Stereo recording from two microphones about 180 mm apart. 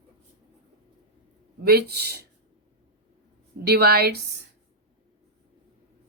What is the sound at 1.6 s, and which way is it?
Speech, 65° right (ahead or behind).